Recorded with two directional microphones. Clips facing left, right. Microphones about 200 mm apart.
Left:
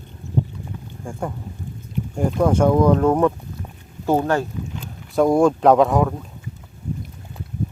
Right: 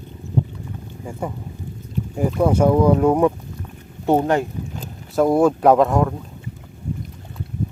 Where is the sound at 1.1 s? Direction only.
5° right (ahead or behind).